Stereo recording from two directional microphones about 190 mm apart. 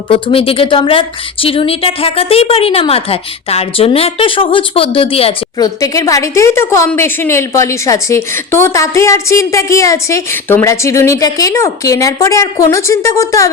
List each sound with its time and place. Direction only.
0.1 s a woman's voice: 30° left (ahead or behind)